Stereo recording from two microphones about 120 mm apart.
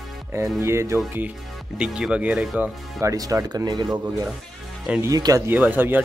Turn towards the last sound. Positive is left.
turn(degrees=-15)  # may be behind; listen again after turning